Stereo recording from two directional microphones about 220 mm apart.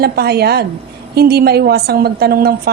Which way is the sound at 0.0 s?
45° right (ahead or behind).